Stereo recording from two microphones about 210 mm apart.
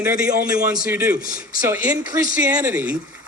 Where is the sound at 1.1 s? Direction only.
45° left (ahead or behind).